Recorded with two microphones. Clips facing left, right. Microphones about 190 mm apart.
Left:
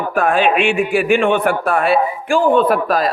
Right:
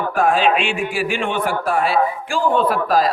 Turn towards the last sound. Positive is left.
turn(degrees=60)  # may be behind; listen again after turning